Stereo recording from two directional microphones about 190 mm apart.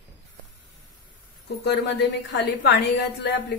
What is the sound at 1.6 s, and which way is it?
A woman's voice, 65° left (ahead or behind).